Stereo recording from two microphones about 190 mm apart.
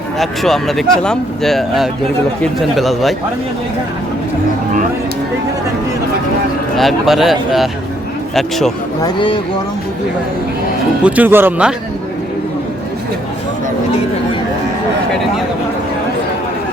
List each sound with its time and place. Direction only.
0.2 s speech: centre (ahead or behind)
6.7 s speech: centre (ahead or behind)
9.0 s speech: 25° left (ahead or behind)
11.0 s speech: 10° right (ahead or behind)